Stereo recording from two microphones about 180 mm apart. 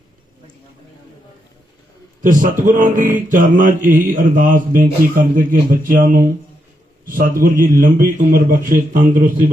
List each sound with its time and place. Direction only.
2.2 s mantra: 45° right (ahead or behind)